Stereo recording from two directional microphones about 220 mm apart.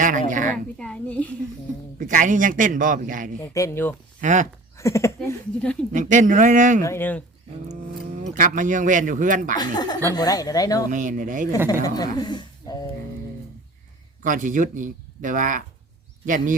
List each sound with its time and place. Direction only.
0.0 s a woman's voice: 35° right (ahead or behind)
0.5 s a child's voice: 5° left (ahead or behind)
2.0 s speech: 35° right (ahead or behind)
3.4 s speech: 15° left (ahead or behind)
4.2 s speech: 35° right (ahead or behind)
4.8 s speech: 15° left (ahead or behind)
5.9 s speech: 35° right (ahead or behind)
6.8 s speech: 10° left (ahead or behind)
8.2 s speech: 35° right (ahead or behind)
9.6 s speech: 20° left (ahead or behind)
10.9 s speech: 35° right (ahead or behind)
11.8 s speech: 15° left (ahead or behind)
14.3 s speech: 35° right (ahead or behind)